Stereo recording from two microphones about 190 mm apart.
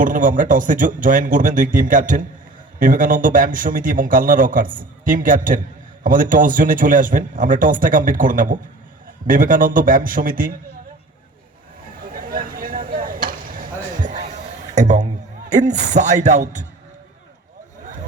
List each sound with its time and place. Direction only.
0.0 s a man's voice: 45° right (ahead or behind)
12.0 s a sound: 50° right (ahead or behind)
14.8 s speech: 40° right (ahead or behind)